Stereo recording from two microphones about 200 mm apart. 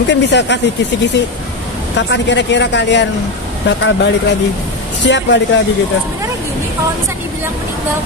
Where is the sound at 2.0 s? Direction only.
60° left (ahead or behind).